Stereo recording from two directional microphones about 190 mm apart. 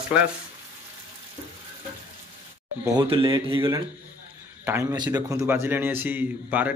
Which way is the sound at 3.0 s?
25° right (ahead or behind).